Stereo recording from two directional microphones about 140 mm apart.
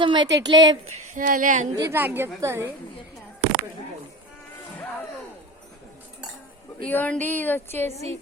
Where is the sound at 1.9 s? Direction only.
15° right (ahead or behind).